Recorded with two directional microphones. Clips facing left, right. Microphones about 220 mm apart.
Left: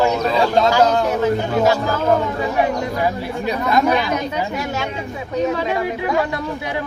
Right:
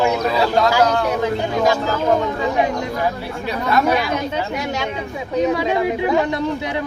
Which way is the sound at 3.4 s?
15° left (ahead or behind).